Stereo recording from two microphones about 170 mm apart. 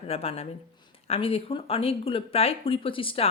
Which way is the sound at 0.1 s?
35° left (ahead or behind).